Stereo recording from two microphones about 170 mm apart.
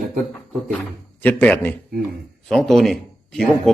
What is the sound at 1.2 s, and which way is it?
A man's voice, 10° left (ahead or behind).